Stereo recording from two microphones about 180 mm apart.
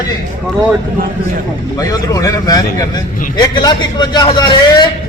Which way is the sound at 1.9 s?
20° left (ahead or behind).